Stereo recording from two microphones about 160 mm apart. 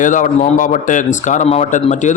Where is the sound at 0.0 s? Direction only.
55° left (ahead or behind).